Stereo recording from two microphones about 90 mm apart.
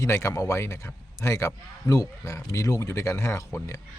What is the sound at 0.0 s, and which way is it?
A man's voice, 30° left (ahead or behind).